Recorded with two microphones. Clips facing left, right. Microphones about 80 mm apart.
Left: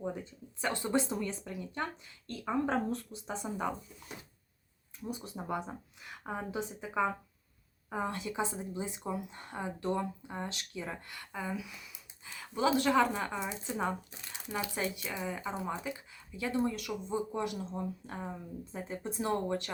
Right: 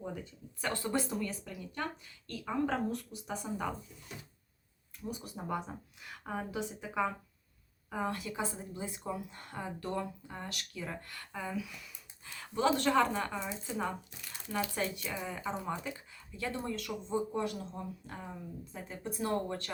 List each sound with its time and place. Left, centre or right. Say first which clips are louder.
0.6 s speech: left 2 dB; centre
5.5 s a woman's voice: even; centre
19.5 s a woman's voice: left 4 dB; centre